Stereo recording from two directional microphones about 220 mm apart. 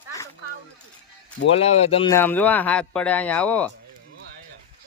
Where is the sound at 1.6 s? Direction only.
30° left (ahead or behind).